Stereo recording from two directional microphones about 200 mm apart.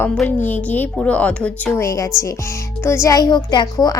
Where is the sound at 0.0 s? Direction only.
10° left (ahead or behind).